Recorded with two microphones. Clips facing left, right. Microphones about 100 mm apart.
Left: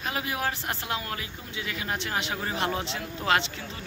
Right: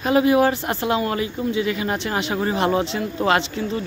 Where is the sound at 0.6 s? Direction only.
90° right.